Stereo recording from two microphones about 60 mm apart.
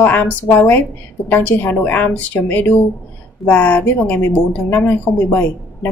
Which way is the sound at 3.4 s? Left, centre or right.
Left.